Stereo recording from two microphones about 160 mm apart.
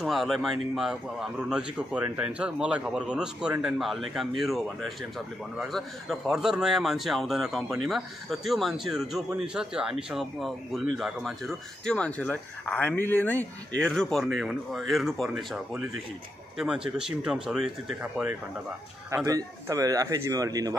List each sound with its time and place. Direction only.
0.0 s speech: centre (ahead or behind)
19.0 s speech: 20° right (ahead or behind)